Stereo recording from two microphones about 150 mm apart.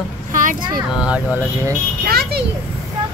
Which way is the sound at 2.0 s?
90° right.